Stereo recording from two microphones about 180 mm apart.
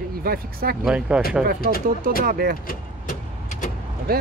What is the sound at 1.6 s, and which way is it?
Speech, 55° left (ahead or behind).